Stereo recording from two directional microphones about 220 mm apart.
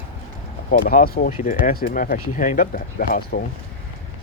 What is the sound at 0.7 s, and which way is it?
Speech, 40° left (ahead or behind).